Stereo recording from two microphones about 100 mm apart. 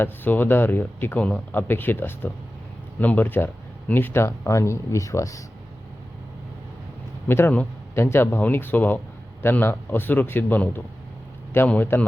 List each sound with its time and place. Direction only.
0.0 s speech: 20° left (ahead or behind)
7.3 s speech: 25° left (ahead or behind)